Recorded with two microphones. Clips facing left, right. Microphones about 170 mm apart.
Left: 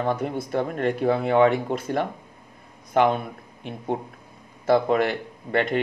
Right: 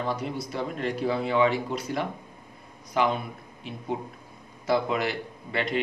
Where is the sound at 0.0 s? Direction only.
55° left (ahead or behind).